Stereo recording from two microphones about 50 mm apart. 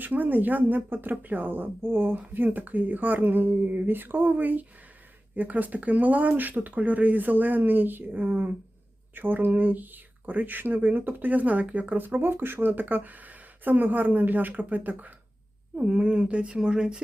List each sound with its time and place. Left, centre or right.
0.0 s speech: right
3.8 s speech: right
15.8 s speech: right